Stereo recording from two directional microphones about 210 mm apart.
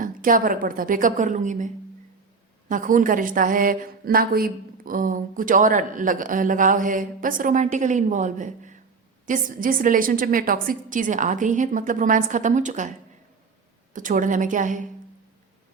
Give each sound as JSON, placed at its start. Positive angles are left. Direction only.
{"t": 0.0, "sound": "a woman's voice", "side_deg": -40}
{"t": 13.9, "sound": "a woman's voice", "side_deg": -40}